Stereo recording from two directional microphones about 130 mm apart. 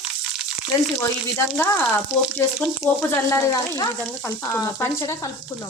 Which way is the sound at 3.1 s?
20° left (ahead or behind).